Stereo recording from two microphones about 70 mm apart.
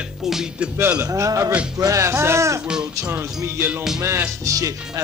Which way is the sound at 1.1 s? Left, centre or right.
Right.